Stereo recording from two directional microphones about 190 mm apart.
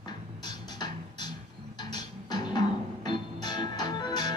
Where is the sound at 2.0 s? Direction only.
20° left (ahead or behind).